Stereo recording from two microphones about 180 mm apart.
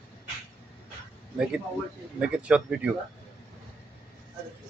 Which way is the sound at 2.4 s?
5° right (ahead or behind).